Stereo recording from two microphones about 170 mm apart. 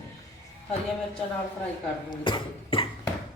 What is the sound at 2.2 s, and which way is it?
Speech, 30° left (ahead or behind).